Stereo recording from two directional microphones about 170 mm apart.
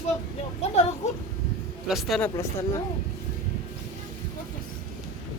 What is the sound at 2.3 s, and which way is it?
Speech, 15° left (ahead or behind).